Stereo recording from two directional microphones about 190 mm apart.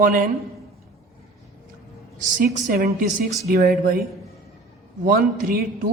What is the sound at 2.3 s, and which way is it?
Speech, 45° right (ahead or behind).